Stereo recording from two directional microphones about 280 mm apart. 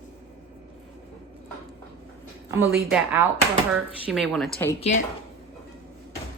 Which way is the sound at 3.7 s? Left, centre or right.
Centre.